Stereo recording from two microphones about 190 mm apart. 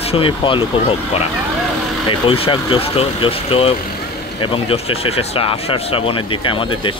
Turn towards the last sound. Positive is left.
turn(degrees=25)  # may be behind; listen again after turning